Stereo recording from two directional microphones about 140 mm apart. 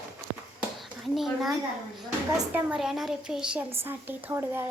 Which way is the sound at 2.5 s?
5° right (ahead or behind).